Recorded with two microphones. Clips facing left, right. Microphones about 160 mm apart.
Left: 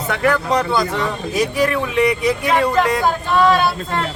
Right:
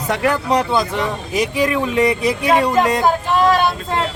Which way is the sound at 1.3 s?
15° right (ahead or behind).